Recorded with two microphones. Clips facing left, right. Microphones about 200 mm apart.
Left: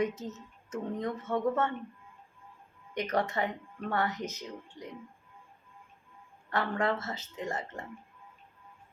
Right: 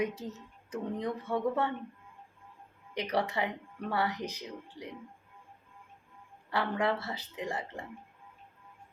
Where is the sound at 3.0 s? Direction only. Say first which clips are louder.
Left 1 dB; 15° right (ahead or behind).